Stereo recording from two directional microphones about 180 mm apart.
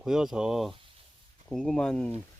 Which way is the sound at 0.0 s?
Centre (ahead or behind).